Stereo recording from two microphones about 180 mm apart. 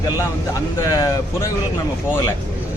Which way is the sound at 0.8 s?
20° left (ahead or behind).